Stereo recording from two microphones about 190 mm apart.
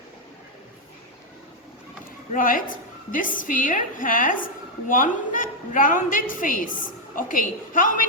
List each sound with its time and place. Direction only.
2.3 s a woman's voice: 45° left (ahead or behind)